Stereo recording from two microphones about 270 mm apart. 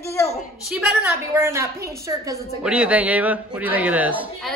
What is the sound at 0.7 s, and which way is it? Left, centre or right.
A man's voice, centre.